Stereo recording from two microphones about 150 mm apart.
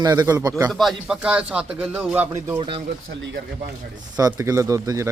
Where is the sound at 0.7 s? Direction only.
Centre (ahead or behind).